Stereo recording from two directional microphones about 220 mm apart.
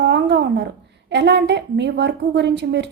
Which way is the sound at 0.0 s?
50° right (ahead or behind).